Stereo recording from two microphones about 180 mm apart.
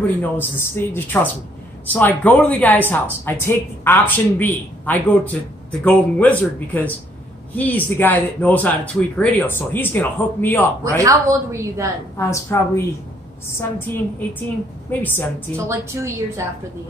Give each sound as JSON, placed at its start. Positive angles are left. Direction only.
{"t": 0.2, "sound": "speech", "side_deg": 10}
{"t": 11.0, "sound": "a woman's voice", "side_deg": -15}
{"t": 12.2, "sound": "speech", "side_deg": 15}
{"t": 14.9, "sound": "speech", "side_deg": 10}
{"t": 15.5, "sound": "a woman's voice", "side_deg": -15}